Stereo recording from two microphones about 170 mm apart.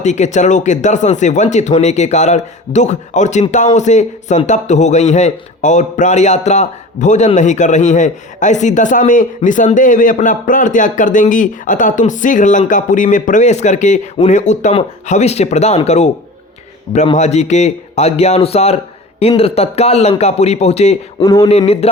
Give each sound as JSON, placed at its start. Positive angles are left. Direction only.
{"t": 0.0, "sound": "a man's voice", "side_deg": 45}
{"t": 17.2, "sound": "speech", "side_deg": 40}
{"t": 21.2, "sound": "speech", "side_deg": 20}